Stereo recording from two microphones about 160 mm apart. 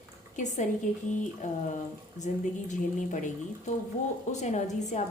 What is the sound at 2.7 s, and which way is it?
A woman's voice, 50° left (ahead or behind).